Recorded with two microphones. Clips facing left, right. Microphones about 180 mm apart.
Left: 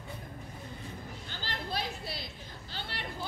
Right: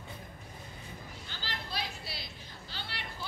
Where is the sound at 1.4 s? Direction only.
50° left (ahead or behind).